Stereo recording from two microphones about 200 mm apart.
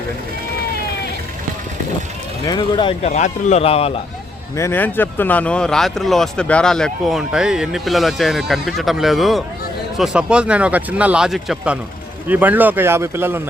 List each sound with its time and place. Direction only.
2.5 s speech: 20° left (ahead or behind)
4.5 s speech: 10° left (ahead or behind); by 13.4 s 10° right (ahead or behind)